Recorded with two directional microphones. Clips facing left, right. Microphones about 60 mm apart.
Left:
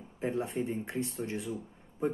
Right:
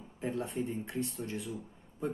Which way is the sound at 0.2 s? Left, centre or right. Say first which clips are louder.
Left 3 dB; left.